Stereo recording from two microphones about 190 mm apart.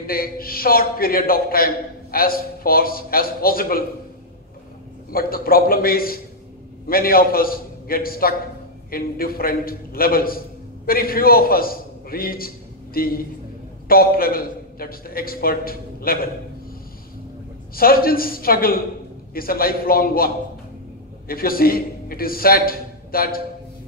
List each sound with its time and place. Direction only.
0.0 s a man's voice: 50° left (ahead or behind)
5.1 s a man's voice: 50° left (ahead or behind)
17.7 s a man's voice: 50° left (ahead or behind)
21.3 s a man's voice: 50° left (ahead or behind)